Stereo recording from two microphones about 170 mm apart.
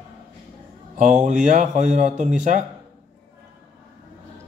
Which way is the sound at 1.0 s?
45° right (ahead or behind).